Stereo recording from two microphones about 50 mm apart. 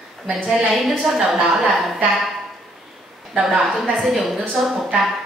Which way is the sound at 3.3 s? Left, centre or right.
Centre.